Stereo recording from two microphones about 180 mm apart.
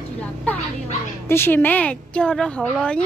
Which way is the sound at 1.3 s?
10° left (ahead or behind).